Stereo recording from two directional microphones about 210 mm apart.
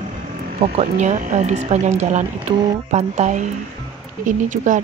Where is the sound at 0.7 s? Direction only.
35° right (ahead or behind).